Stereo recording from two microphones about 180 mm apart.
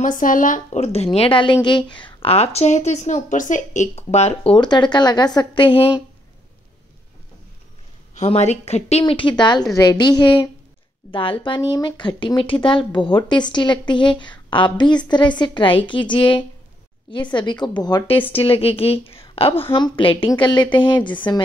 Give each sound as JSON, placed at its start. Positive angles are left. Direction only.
{"t": 0.0, "sound": "speech", "side_deg": 45}
{"t": 8.2, "sound": "speech", "side_deg": 40}